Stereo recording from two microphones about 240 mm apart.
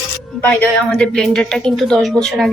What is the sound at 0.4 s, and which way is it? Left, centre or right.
A woman's voice, centre.